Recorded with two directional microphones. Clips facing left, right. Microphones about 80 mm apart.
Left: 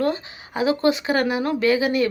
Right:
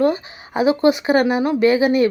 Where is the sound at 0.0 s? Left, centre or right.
Right.